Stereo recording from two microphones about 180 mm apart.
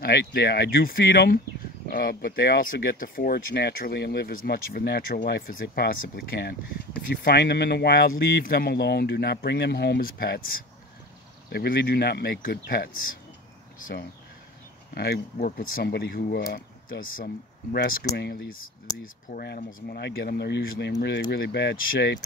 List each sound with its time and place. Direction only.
0.0 s speech: 65° left (ahead or behind)